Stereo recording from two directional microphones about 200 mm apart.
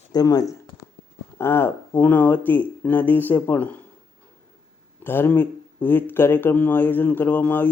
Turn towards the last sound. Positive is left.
turn(degrees=10)  # may be behind; listen again after turning